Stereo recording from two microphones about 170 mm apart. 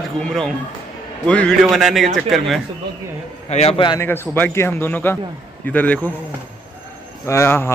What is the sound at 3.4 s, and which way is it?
Speech, 40° left (ahead or behind).